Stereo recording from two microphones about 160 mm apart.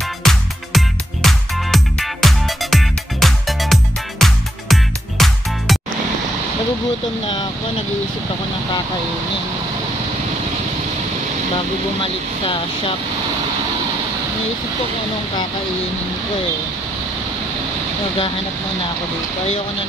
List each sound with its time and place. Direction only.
0.2 s music: centre (ahead or behind)
12.0 s speech: 35° left (ahead or behind)